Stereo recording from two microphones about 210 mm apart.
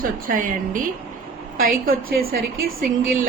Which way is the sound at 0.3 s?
40° right (ahead or behind).